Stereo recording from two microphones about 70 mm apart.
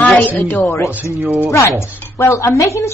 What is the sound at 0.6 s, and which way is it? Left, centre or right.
Speech, left.